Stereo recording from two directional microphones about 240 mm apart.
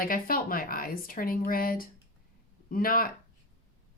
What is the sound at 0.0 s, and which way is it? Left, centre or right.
Speech, left.